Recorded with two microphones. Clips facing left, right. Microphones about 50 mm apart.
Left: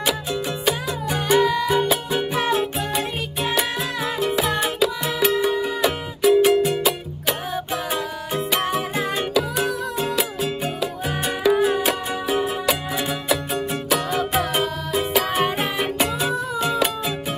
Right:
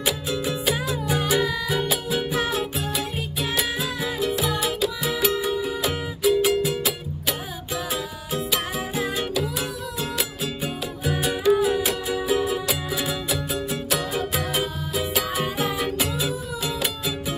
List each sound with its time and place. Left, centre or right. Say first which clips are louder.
0.0 s music: left 2 dB; centre
4.6 s music: left 3 dB; centre
15.1 s music: left 7 dB; left